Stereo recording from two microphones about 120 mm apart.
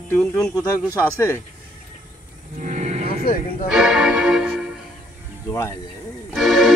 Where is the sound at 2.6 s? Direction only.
80° right.